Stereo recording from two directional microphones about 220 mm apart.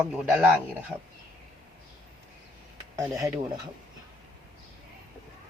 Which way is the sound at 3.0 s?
15° right (ahead or behind).